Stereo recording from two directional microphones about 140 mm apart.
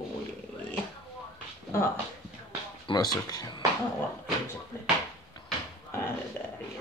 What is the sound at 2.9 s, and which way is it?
Speech, 30° left (ahead or behind).